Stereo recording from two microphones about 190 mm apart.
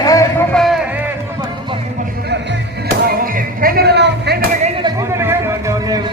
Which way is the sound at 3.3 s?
50° right (ahead or behind).